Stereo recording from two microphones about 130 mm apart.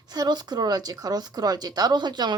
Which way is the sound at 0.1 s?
30° right (ahead or behind).